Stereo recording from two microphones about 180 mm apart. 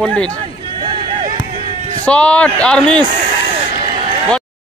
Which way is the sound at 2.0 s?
5° left (ahead or behind).